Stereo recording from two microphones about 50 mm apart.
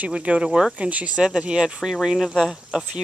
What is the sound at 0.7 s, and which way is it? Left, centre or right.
Speech, right.